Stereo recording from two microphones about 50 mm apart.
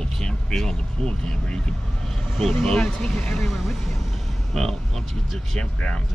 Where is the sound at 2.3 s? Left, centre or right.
Centre.